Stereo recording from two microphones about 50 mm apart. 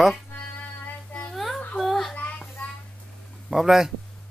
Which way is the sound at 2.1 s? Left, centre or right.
Left.